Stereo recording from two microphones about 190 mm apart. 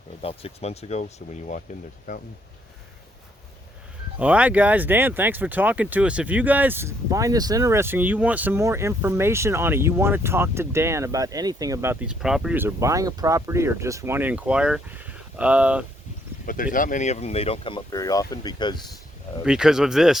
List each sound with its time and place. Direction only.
0.2 s speech: 30° left (ahead or behind)
4.2 s speech: 5° right (ahead or behind)
16.7 s speech: 45° left (ahead or behind); by 18.8 s 20° left (ahead or behind)
19.5 s speech: 5° right (ahead or behind)